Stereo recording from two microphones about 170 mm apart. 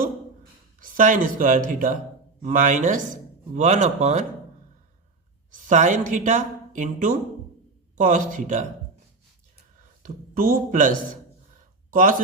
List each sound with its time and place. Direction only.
0.8 s speech: 50° right (ahead or behind)
5.5 s a woman's voice: 45° right (ahead or behind)
10.0 s speech: 55° right (ahead or behind)